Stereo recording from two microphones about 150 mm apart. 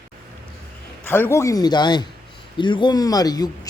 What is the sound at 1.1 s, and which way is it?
Speech, 15° left (ahead or behind).